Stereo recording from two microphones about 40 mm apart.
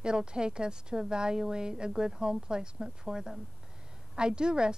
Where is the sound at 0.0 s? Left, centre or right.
Right.